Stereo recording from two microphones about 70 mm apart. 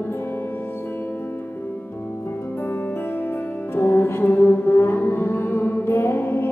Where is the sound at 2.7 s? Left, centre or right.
Left.